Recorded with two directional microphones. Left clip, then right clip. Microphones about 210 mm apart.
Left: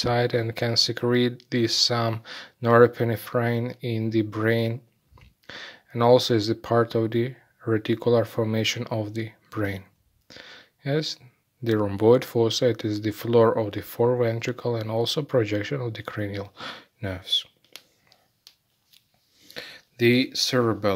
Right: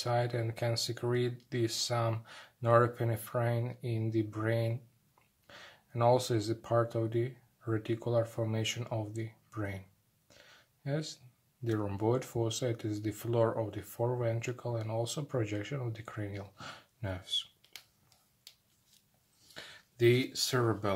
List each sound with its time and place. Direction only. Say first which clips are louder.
0.0 s speech: left 10 dB; 35° left (ahead or behind)
19.5 s speech: left 10 dB; 45° left (ahead or behind)